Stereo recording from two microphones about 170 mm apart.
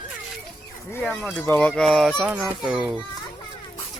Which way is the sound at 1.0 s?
5° left (ahead or behind).